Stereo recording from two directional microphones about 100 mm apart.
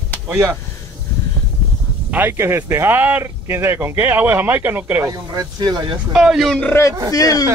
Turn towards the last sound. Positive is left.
turn(degrees=35)  # may be behind; listen again after turning